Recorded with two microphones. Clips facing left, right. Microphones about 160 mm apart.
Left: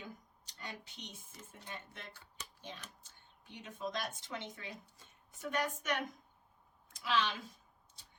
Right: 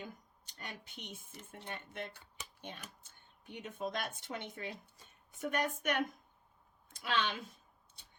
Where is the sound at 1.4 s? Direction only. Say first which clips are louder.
Right 3 dB; 60° right (ahead or behind).